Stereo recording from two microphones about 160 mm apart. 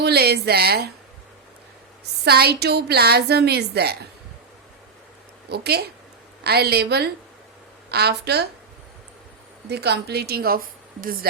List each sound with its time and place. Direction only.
0.0 s a woman's voice: 85° right
2.2 s a woman's voice: 80° right
5.5 s a woman's voice: 85° right
9.6 s a woman's voice: 90° right; by 11.3 s 65° right (ahead or behind)